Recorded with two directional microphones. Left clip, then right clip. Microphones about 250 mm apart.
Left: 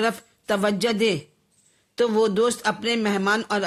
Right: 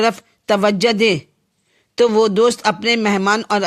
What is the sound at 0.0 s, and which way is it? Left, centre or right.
Speech, right.